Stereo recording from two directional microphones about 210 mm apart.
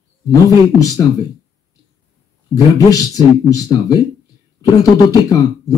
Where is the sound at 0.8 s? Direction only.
15° left (ahead or behind).